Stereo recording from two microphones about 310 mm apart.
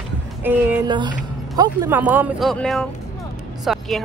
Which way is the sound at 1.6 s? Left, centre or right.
Centre.